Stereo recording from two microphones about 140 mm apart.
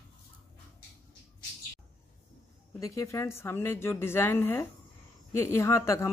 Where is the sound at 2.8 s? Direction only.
20° left (ahead or behind).